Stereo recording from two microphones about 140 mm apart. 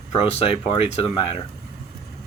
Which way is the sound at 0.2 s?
45° left (ahead or behind).